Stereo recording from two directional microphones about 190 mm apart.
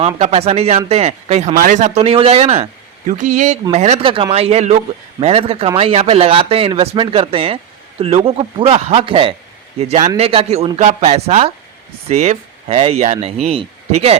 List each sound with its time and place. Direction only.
0.2 s speech: 35° right (ahead or behind)